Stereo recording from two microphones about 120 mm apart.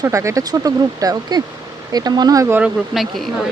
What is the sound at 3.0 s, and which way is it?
Speech, centre (ahead or behind).